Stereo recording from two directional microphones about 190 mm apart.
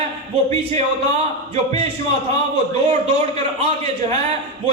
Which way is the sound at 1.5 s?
30° right (ahead or behind).